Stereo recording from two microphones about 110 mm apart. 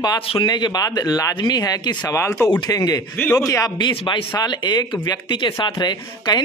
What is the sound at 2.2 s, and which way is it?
Speech, 25° left (ahead or behind).